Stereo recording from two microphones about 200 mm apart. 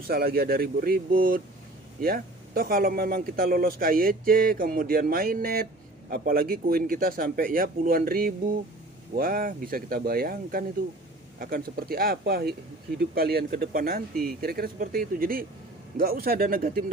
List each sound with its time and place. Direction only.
0.1 s a man's voice: 50° right (ahead or behind)